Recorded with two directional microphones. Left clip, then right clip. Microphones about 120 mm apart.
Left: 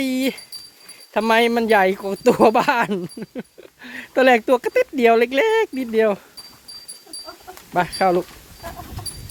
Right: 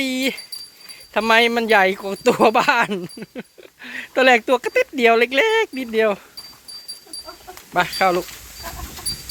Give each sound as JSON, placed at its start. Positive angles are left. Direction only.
{"t": 0.0, "sound": "speech", "side_deg": 30}
{"t": 7.8, "sound": "speech", "side_deg": 35}
{"t": 8.1, "sound": "a sound", "side_deg": 0}